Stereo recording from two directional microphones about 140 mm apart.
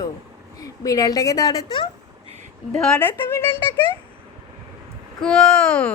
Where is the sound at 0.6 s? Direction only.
25° left (ahead or behind).